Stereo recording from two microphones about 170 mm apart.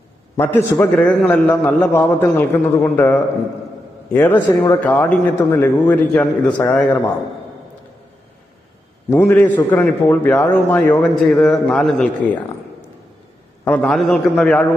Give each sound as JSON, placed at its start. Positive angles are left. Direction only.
{"t": 0.3, "sound": "a man's voice", "side_deg": 15}
{"t": 9.0, "sound": "a man's voice", "side_deg": 15}
{"t": 13.7, "sound": "a man's voice", "side_deg": 5}